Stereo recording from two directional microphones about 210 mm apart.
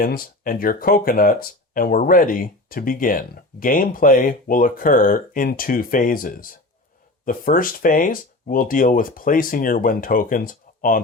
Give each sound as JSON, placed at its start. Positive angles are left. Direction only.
{"t": 0.0, "sound": "speech", "side_deg": 45}